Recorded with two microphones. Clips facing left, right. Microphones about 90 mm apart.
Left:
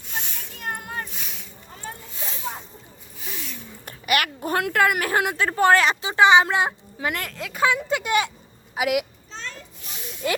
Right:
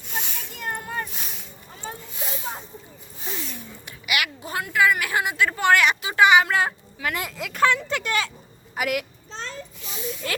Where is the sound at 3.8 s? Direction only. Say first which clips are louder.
Left 4 dB; 45° left (ahead or behind).